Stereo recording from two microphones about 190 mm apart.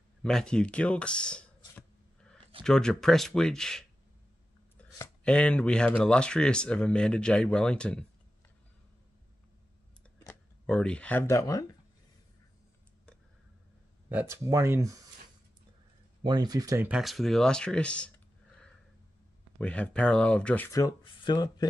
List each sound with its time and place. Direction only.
0.2 s speech: 5° left (ahead or behind)
2.6 s speech: 5° left (ahead or behind)
4.9 s speech: 10° left (ahead or behind)
10.1 s speech: 10° left (ahead or behind)
14.0 s speech: 15° right (ahead or behind)
16.2 s speech: 20° right (ahead or behind); by 18.1 s 5° left (ahead or behind)
19.6 s speech: 5° left (ahead or behind); by 21.6 s 20° left (ahead or behind)